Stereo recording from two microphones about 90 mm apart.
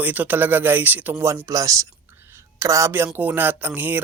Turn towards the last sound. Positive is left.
turn(degrees=-20)  # may be behind; listen again after turning